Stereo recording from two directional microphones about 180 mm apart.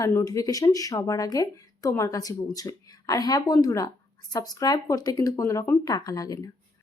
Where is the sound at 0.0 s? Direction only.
15° left (ahead or behind).